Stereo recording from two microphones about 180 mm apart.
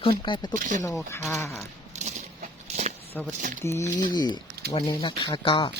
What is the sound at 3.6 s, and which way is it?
Speech, 15° left (ahead or behind).